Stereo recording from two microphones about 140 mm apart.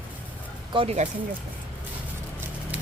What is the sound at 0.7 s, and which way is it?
Speech, 40° right (ahead or behind).